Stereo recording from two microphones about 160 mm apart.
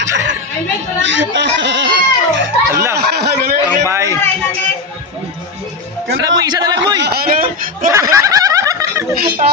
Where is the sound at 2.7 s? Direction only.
15° right (ahead or behind).